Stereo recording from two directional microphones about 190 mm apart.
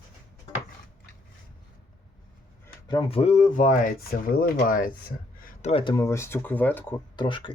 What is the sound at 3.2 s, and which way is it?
Speech, 40° left (ahead or behind).